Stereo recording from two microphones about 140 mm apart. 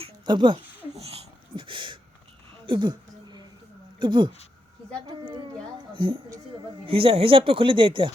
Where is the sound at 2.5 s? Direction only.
35° right (ahead or behind).